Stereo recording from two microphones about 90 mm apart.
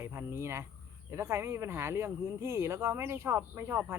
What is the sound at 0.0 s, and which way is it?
Speech, 25° right (ahead or behind).